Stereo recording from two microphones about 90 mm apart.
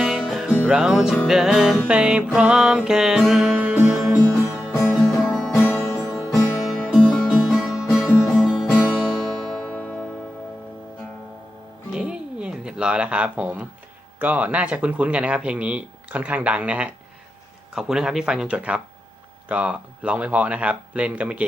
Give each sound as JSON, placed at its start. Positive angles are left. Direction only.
{"t": 0.0, "sound": "music", "side_deg": -5}
{"t": 0.7, "sound": "speech", "side_deg": -5}
{"t": 1.3, "sound": "music", "side_deg": -5}
{"t": 1.9, "sound": "speech", "side_deg": -10}
{"t": 3.6, "sound": "music", "side_deg": -15}
{"t": 4.2, "sound": "music", "side_deg": 10}
{"t": 4.7, "sound": "music", "side_deg": -5}
{"t": 5.6, "sound": "music", "side_deg": 30}
{"t": 6.7, "sound": "music", "side_deg": 0}
{"t": 9.6, "sound": "music", "side_deg": 15}
{"t": 11.9, "sound": "music", "side_deg": -10}
{"t": 14.2, "sound": "speech", "side_deg": -20}